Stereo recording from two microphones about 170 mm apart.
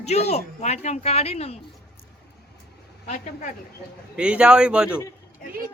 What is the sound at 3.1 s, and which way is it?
Speech, 45° left (ahead or behind).